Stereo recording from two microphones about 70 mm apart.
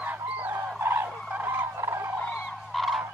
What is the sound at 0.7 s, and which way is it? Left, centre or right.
Fowl, right.